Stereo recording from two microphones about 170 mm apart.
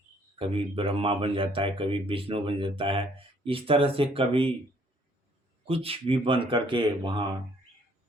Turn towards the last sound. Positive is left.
turn(degrees=-30)  # may be behind; listen again after turning